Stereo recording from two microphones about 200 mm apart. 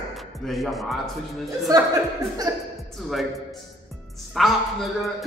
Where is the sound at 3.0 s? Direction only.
Centre (ahead or behind).